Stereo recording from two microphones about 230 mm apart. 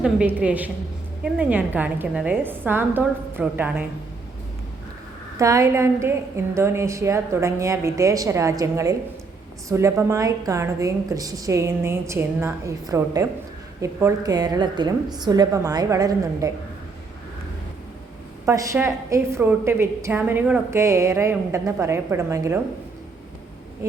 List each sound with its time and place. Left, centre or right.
0.0 s a woman's voice: centre
5.4 s a woman's voice: centre
18.4 s a woman's voice: centre